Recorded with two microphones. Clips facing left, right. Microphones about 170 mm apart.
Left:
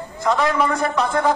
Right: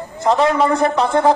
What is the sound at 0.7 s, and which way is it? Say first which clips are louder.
Speech: right 5 dB; 30° right (ahead or behind).